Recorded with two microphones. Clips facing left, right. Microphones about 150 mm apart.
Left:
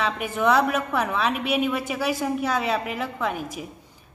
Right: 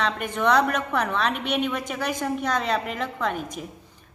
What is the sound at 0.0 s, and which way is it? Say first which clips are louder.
A woman's voice: left 1 dB; 5° left (ahead or behind).